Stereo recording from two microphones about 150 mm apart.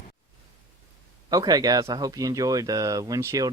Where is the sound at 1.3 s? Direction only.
25° right (ahead or behind).